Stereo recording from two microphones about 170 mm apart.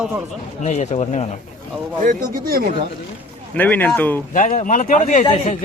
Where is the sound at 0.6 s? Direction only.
40° left (ahead or behind).